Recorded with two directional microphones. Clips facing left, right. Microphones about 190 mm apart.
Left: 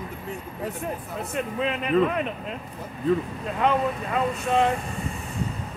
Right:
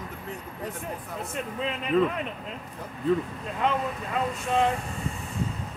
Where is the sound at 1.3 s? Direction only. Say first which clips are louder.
Left 5 dB; 65° left (ahead or behind).